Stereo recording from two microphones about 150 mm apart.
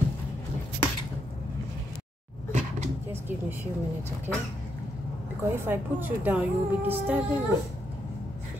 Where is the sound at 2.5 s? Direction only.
50° right (ahead or behind).